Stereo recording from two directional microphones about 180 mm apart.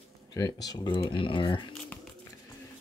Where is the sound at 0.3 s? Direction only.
20° left (ahead or behind).